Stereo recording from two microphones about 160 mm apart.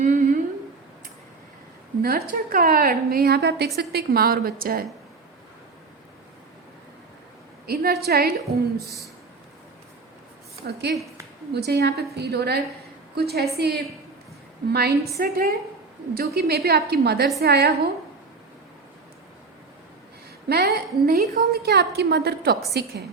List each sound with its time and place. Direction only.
0.0 s humming: 55° right (ahead or behind)
2.0 s a woman's voice: 70° right (ahead or behind); by 3.7 s 90° right
3.8 s a woman's voice: 75° right (ahead or behind)
7.7 s a woman's voice: 75° right (ahead or behind)
10.7 s a woman's voice: 90° right
15.2 s a woman's voice: 65° right (ahead or behind)
16.1 s a woman's voice: 75° right (ahead or behind)
20.5 s a woman's voice: 75° right (ahead or behind)